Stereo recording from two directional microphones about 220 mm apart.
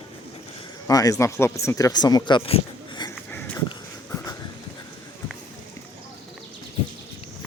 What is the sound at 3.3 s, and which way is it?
Dog, 10° left (ahead or behind).